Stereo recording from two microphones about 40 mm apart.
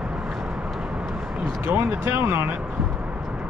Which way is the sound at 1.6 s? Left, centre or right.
Right.